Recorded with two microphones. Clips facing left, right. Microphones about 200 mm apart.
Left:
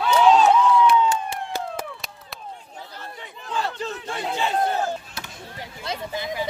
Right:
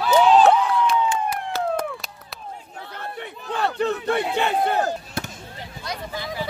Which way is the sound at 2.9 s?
60° right (ahead or behind).